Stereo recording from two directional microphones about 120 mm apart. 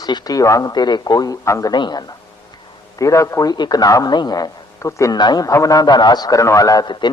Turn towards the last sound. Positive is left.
turn(degrees=40)  # may be behind; listen again after turning